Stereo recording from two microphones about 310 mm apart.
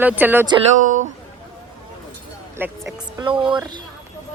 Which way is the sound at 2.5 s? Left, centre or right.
Centre.